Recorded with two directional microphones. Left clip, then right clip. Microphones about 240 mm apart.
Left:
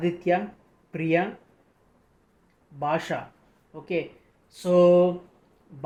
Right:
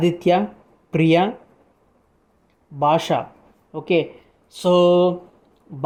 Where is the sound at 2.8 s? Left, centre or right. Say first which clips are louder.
Right 9 dB; right.